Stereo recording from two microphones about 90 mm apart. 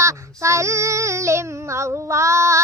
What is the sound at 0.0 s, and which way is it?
Child singing, 35° right (ahead or behind).